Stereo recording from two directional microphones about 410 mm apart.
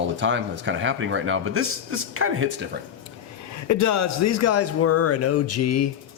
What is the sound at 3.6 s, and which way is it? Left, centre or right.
A man's voice, left.